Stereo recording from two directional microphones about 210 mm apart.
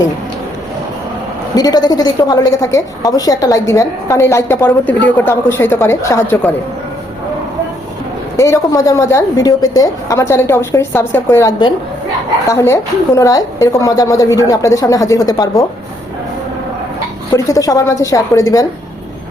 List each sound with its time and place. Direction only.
1.5 s a woman's voice: 20° left (ahead or behind)
8.4 s a woman's voice: 15° left (ahead or behind)
17.3 s a woman's voice: 15° left (ahead or behind)